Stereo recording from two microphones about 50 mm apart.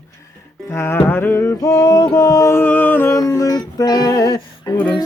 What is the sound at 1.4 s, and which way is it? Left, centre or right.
Music, left.